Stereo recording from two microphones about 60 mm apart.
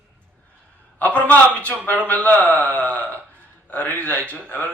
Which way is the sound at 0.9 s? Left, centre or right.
Left.